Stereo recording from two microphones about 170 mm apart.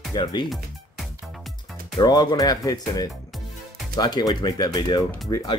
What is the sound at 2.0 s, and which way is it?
Speech, 25° left (ahead or behind).